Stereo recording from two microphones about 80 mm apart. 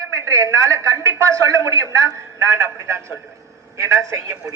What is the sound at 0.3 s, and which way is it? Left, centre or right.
A woman's voice, right.